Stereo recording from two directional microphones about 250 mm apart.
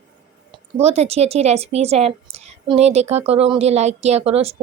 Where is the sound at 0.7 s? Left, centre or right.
Right.